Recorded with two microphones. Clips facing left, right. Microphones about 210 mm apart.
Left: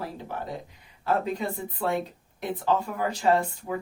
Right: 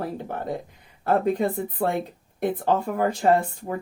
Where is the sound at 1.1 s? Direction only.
50° right (ahead or behind).